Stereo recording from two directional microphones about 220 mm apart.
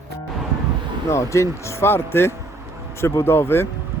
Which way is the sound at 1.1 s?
15° left (ahead or behind).